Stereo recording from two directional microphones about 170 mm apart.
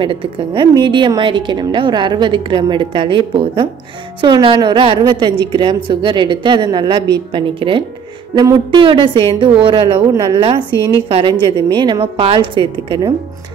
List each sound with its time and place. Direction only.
0.0 s a woman's voice: 30° right (ahead or behind)